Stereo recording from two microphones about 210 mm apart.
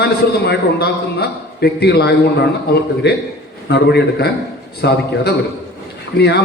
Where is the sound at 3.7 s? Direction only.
50° left (ahead or behind).